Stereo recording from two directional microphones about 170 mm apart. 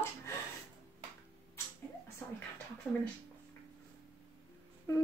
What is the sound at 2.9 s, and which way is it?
Speech, 10° left (ahead or behind).